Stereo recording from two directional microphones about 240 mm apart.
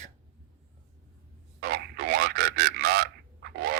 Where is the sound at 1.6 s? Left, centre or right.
Right.